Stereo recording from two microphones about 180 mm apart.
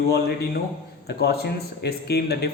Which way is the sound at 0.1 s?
60° left (ahead or behind).